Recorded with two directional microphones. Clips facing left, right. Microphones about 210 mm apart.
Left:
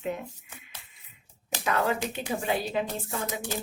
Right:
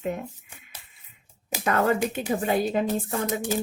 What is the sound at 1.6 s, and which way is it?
A woman's voice, 50° right (ahead or behind).